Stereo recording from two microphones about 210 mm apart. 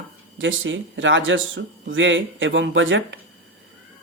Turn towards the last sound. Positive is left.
turn(degrees=-65)  # may be behind; listen again after turning